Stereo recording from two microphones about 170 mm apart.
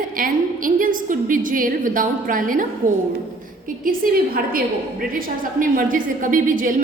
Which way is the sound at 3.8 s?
55° right (ahead or behind).